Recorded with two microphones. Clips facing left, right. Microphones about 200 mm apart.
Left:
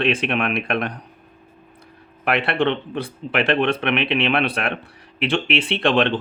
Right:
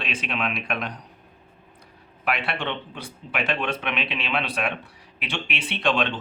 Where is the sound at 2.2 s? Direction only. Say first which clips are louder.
Left 8 dB; 60° left (ahead or behind).